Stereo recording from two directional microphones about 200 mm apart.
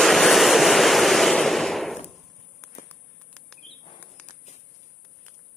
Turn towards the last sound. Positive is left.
turn(degrees=5)  # may be behind; listen again after turning